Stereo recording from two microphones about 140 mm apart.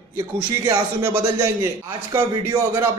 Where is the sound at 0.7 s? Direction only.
20° right (ahead or behind).